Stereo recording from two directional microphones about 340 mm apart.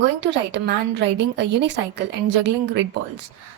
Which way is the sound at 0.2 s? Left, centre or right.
Right.